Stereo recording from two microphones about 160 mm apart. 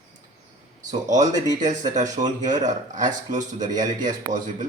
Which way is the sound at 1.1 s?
50° right (ahead or behind).